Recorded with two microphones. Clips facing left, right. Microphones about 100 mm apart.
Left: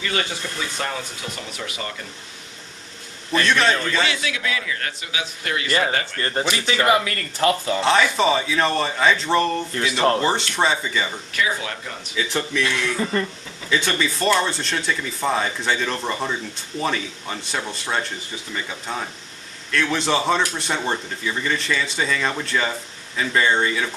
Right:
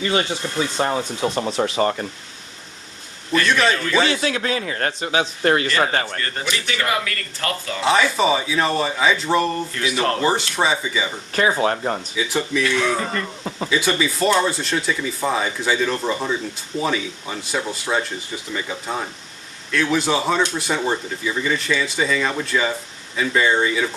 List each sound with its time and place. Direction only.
0.0 s a man's voice: 30° right (ahead or behind)
3.4 s speech: centre (ahead or behind)
4.0 s a man's voice: 40° right (ahead or behind)
6.1 s speech: 30° left (ahead or behind)
7.8 s speech: 5° right (ahead or behind)
9.7 s speech: 30° left (ahead or behind)
10.2 s speech: 5° right (ahead or behind)
11.3 s a man's voice: 40° right (ahead or behind)
12.1 s speech: 10° right (ahead or behind)
13.1 s speech: 25° left (ahead or behind)
13.7 s speech: 5° right (ahead or behind)